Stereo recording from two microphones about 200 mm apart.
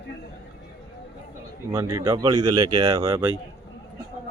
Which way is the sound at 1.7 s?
15° right (ahead or behind).